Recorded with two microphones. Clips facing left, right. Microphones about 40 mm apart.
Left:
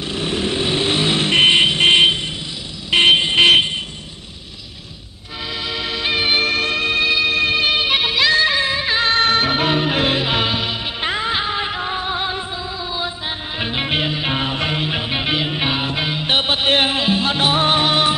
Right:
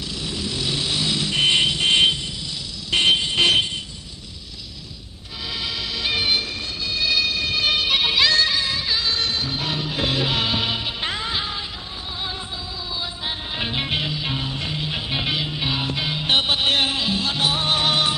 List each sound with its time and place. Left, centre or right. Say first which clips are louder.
0.1 s vehicle: left 9 dB; left
3.0 s vehicle: left 6 dB; left
5.6 s music: left 4 dB; left
6.4 s music: left 11 dB; left
7.2 s music: left 7 dB; left
7.6 s music: left 3 dB; left
8.9 s music: left 11 dB; left
10.2 s music: left 3 dB; centre
11.6 s music: left 11 dB; left
12.2 s music: left 7 dB; left
13.6 s music: left 3 dB; centre
13.8 s music: left 5 dB; left
14.8 s music: left 5 dB; left